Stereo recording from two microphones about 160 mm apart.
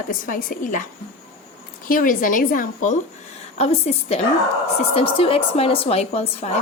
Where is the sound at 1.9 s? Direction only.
60° left (ahead or behind).